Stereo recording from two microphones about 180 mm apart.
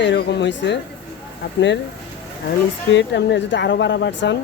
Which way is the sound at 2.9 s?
80° left.